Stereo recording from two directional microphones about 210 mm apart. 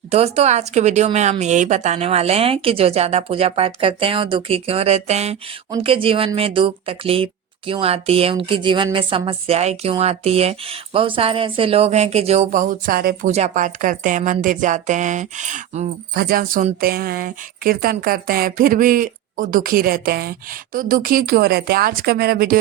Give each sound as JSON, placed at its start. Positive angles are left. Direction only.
{"t": 0.1, "sound": "a woman's voice", "side_deg": -30}
{"t": 13.3, "sound": "a woman's voice", "side_deg": -35}